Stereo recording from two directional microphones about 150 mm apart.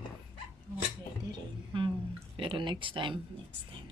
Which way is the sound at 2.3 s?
35° right (ahead or behind).